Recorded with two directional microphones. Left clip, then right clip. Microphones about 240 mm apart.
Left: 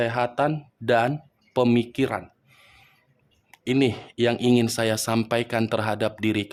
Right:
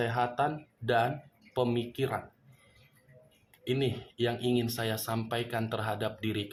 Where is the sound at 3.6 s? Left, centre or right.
Left.